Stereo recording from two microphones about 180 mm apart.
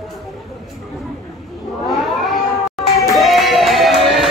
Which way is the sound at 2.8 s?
Centre (ahead or behind).